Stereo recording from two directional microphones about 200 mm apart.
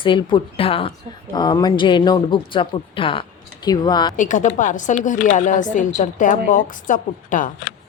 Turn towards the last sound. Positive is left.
turn(degrees=40)  # may be behind; listen again after turning